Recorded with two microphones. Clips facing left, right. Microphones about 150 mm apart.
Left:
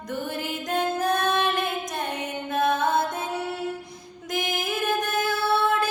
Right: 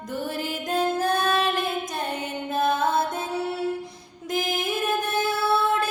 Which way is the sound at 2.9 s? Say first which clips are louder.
Even; 30° right (ahead or behind).